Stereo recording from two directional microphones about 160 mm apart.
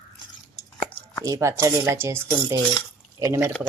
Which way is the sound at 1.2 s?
20° right (ahead or behind).